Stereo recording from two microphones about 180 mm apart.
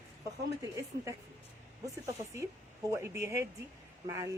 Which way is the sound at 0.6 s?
20° right (ahead or behind).